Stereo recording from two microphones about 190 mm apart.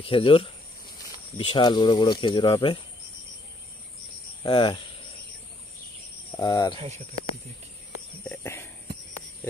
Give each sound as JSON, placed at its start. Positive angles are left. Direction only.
{"t": 0.0, "sound": "speech", "side_deg": 30}
{"t": 4.4, "sound": "speech", "side_deg": 25}
{"t": 6.3, "sound": "speech", "side_deg": 20}
{"t": 8.2, "sound": "a sound", "side_deg": 10}